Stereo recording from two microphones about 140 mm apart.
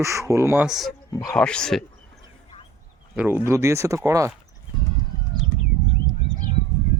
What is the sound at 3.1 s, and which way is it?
Speech, 15° right (ahead or behind).